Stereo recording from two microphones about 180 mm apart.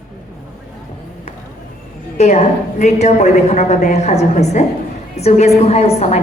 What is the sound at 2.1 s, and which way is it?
A woman's voice, 40° left (ahead or behind).